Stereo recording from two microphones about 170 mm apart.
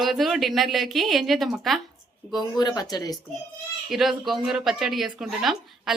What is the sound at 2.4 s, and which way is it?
Speech, 25° left (ahead or behind).